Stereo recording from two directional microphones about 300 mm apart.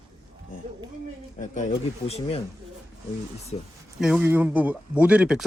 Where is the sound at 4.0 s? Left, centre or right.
Centre.